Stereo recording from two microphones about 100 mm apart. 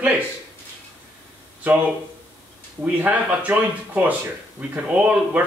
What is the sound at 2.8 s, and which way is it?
Speech, 15° right (ahead or behind).